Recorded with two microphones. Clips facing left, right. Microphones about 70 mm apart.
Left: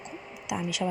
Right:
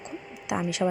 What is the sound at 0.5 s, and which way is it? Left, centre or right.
Speech, right.